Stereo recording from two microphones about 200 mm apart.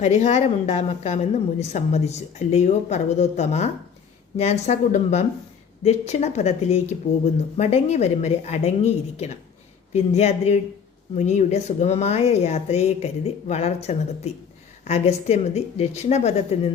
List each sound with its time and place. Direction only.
0.0 s a woman's voice: 35° left (ahead or behind)